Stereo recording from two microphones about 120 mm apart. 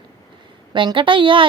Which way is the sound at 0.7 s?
40° right (ahead or behind).